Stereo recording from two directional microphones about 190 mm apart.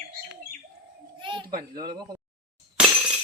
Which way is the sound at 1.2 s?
25° right (ahead or behind).